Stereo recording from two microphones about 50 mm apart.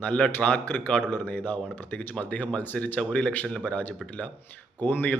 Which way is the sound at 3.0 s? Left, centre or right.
Left.